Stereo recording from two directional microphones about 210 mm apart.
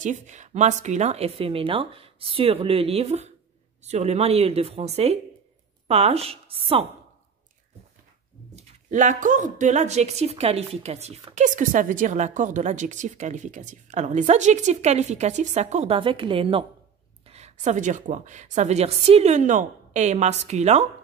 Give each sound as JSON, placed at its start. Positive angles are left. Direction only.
{"t": 0.0, "sound": "speech", "side_deg": -35}
{"t": 8.5, "sound": "speech", "side_deg": -35}